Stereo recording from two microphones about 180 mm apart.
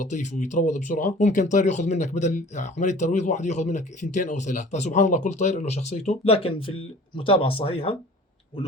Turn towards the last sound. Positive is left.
turn(degrees=30)  # may be behind; listen again after turning